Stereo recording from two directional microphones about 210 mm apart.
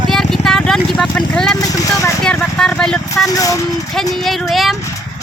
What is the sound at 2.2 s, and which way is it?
Speech, 5° left (ahead or behind).